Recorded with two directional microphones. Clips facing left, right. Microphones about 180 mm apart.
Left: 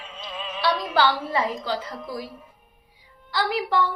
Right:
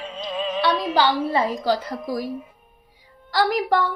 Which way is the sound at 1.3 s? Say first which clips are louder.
Right 4 dB; 35° right (ahead or behind).